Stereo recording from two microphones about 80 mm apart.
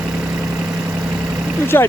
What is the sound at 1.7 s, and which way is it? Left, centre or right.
Speech, left.